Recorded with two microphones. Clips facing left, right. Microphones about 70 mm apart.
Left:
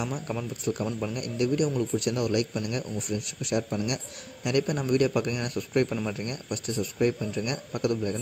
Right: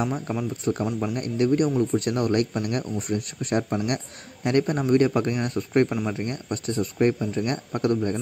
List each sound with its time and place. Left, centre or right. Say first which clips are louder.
0.1 s speech: right 4 dB; centre
1.1 s speech: right 6 dB; right
5.9 s speech: right 4 dB; right